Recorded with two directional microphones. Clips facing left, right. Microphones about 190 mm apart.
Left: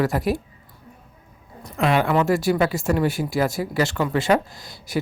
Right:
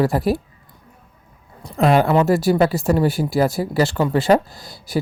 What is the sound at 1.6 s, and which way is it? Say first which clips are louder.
Speech: right 5 dB; 35° right (ahead or behind).